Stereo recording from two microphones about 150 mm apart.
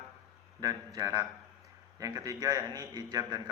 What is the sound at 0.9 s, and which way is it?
A man's voice, 25° right (ahead or behind).